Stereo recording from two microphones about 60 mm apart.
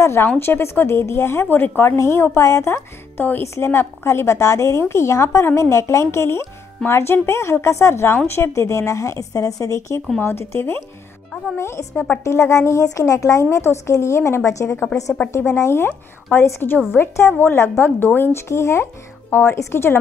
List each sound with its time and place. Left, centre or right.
0.0 s a woman's voice: left
2.0 s a woman's voice: left
8.4 s a woman's voice: left
10.2 s a woman's voice: left
11.9 s speech: left
12.3 s a woman's voice: left
18.5 s a woman's voice: left
19.3 s a woman's voice: left